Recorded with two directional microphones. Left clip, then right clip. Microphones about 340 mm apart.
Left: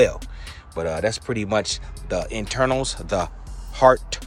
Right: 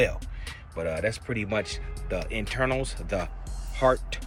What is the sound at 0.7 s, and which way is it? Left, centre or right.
Speech, centre.